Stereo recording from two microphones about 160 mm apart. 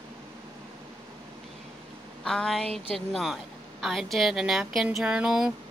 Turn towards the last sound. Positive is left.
turn(degrees=-5)  # may be behind; listen again after turning